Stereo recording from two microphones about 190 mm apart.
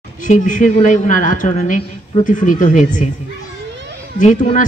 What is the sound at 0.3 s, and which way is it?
A man's voice, 40° left (ahead or behind).